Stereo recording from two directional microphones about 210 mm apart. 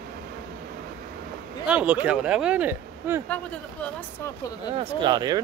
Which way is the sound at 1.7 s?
5° right (ahead or behind).